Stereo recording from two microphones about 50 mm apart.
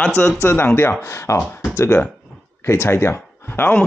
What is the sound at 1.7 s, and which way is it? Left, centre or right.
Speech, left.